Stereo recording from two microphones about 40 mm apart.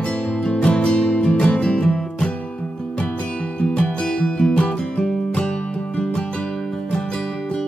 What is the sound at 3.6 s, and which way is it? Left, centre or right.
Music, left.